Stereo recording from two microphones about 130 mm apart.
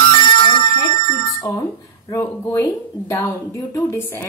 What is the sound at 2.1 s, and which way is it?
A woman's voice, 20° left (ahead or behind).